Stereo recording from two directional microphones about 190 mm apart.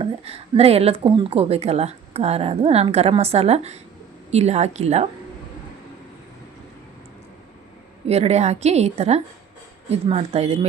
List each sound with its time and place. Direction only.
0.0 s speech: 30° right (ahead or behind)
8.0 s speech: 35° right (ahead or behind)